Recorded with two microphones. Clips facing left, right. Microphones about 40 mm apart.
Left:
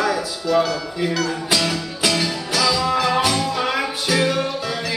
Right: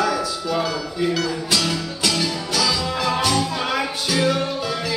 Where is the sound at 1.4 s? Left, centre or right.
Centre.